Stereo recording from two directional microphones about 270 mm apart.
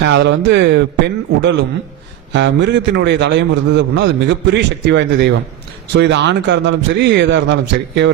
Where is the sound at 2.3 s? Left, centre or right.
Right.